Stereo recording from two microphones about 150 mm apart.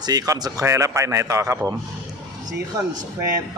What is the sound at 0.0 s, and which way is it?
A man's voice, 25° right (ahead or behind).